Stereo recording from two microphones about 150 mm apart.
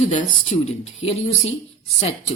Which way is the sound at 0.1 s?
50° left (ahead or behind).